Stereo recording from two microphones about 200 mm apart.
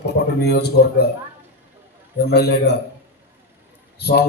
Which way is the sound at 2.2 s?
55° left (ahead or behind).